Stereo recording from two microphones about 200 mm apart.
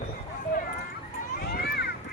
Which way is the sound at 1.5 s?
55° left (ahead or behind).